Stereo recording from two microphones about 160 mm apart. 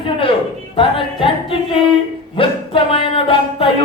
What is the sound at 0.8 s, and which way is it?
A woman's voice, 35° left (ahead or behind).